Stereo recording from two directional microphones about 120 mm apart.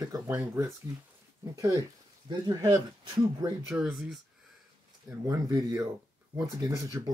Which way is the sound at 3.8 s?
Centre (ahead or behind).